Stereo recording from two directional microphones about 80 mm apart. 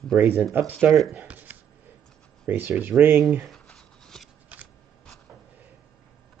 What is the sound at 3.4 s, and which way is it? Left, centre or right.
Writing, centre.